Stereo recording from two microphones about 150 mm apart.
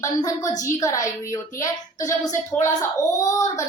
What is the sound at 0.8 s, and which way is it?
A woman's voice, 20° left (ahead or behind).